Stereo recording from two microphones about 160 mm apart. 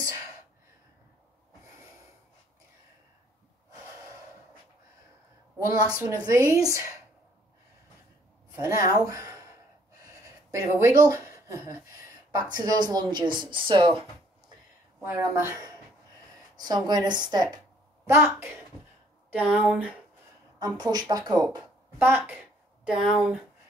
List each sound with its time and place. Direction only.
5.7 s a woman's voice: 20° right (ahead or behind)
8.5 s a woman's voice: 20° right (ahead or behind)
15.0 s a woman's voice: 15° right (ahead or behind)
20.5 s a woman's voice: 25° right (ahead or behind); by 23.4 s 5° right (ahead or behind)